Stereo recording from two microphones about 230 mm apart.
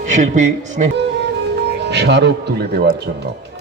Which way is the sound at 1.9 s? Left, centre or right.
Right.